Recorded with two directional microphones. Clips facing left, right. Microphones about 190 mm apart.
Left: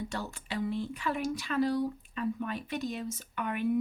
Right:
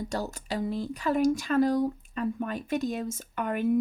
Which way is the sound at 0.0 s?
40° right (ahead or behind).